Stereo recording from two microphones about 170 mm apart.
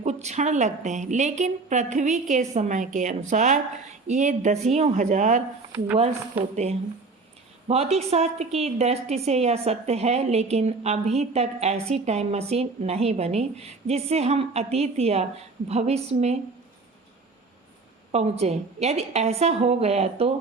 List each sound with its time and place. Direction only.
0.0 s a woman's voice: 40° right (ahead or behind)
7.7 s a woman's voice: 35° right (ahead or behind)
18.1 s a woman's voice: 40° right (ahead or behind)